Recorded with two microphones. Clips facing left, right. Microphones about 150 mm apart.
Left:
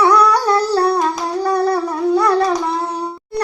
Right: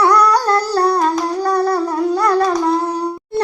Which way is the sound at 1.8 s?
10° right (ahead or behind).